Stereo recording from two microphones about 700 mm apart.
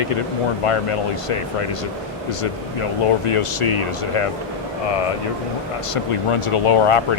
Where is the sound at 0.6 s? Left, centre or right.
Left.